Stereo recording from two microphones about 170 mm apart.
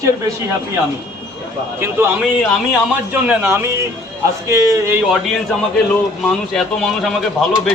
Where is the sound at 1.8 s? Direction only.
15° right (ahead or behind).